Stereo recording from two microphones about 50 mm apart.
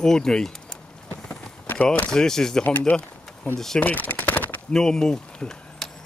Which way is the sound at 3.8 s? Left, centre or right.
Left.